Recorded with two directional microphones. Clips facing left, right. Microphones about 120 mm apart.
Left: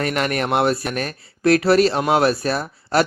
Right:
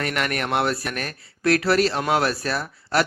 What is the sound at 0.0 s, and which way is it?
Speech, 25° left (ahead or behind).